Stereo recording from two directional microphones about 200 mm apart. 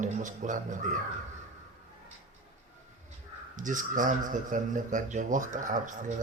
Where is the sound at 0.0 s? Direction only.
40° right (ahead or behind).